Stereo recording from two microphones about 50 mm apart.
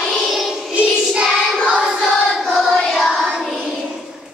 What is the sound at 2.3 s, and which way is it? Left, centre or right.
Choir, centre.